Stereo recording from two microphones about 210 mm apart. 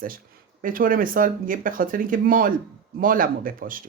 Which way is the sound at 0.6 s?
40° right (ahead or behind).